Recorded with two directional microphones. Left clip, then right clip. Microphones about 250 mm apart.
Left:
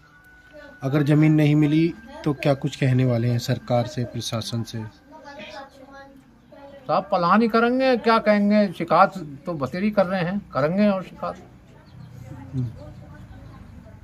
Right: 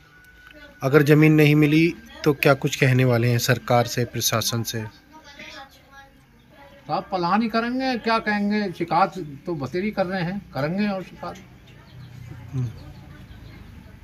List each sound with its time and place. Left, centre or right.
0.7 s a man's voice: centre
6.9 s speech: left